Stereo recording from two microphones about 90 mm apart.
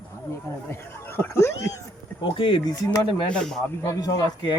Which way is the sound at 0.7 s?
25° left (ahead or behind).